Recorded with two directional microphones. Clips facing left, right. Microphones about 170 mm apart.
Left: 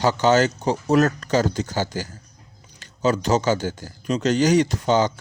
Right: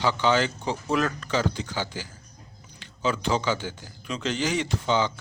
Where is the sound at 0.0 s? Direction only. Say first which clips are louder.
Left 5 dB; 45° left (ahead or behind).